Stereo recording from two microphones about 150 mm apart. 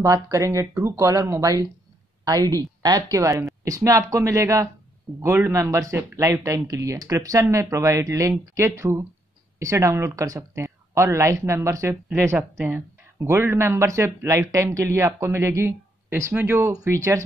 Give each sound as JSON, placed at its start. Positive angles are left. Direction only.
{"t": 0.0, "sound": "speech", "side_deg": -20}